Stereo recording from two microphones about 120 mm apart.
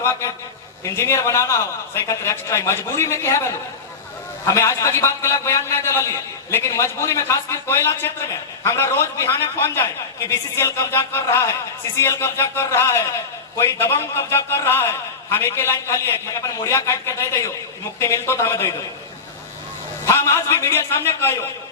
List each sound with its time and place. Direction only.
0.0 s a man's voice: 20° left (ahead or behind)
20.1 s a man's voice: 25° left (ahead or behind)